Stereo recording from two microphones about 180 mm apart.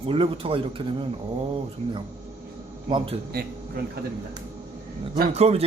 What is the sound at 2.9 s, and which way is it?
Speech, 30° right (ahead or behind).